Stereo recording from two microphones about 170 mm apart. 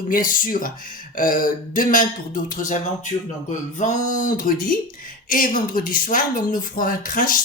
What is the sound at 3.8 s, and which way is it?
Speech, 45° left (ahead or behind).